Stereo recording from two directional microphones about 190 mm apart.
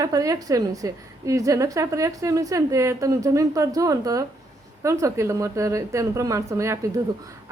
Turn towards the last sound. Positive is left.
turn(degrees=-15)  # may be behind; listen again after turning